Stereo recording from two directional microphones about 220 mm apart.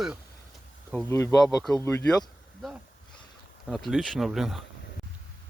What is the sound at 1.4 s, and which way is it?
Speech, 5° left (ahead or behind).